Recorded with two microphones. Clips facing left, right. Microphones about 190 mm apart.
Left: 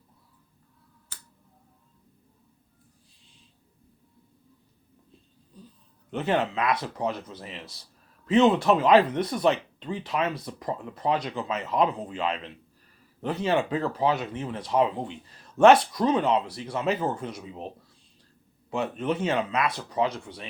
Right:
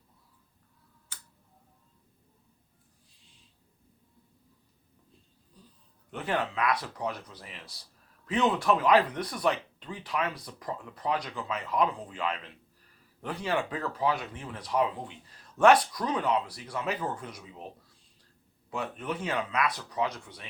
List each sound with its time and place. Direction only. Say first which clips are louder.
6.1 s speech: left 6 dB; 25° left (ahead or behind)
18.7 s speech: left 7 dB; 25° left (ahead or behind)